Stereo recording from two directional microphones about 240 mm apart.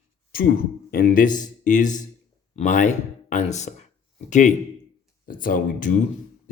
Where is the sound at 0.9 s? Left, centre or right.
Left.